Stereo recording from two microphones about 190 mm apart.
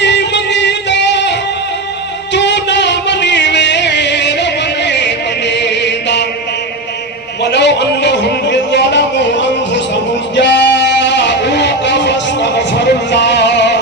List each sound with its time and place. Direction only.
0.0 s music: 65° left (ahead or behind)
7.4 s a sound: 65° left (ahead or behind)
10.3 s music: 65° left (ahead or behind)